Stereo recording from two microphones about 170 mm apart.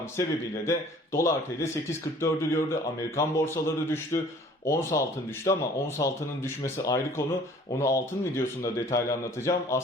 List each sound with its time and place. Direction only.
0.2 s a man's voice: 15° left (ahead or behind)